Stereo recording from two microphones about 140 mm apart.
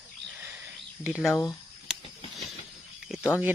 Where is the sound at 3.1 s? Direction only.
5° right (ahead or behind).